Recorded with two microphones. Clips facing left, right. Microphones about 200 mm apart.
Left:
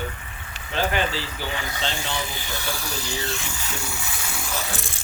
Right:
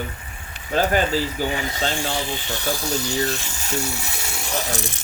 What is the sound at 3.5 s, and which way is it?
Speech, 45° right (ahead or behind).